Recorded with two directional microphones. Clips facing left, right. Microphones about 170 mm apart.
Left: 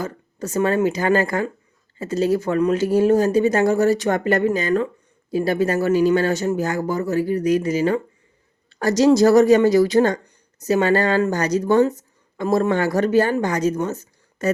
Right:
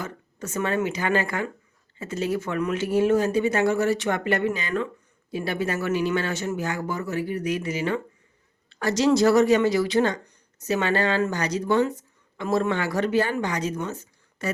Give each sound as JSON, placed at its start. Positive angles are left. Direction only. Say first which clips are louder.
{"t": 0.0, "sound": "speech", "louder": "left 6 dB", "side_deg": 40}